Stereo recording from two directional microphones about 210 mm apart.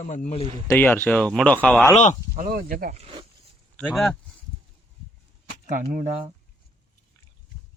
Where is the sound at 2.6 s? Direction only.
45° right (ahead or behind).